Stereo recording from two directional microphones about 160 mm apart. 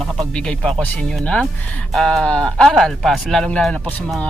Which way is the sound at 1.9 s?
5° left (ahead or behind).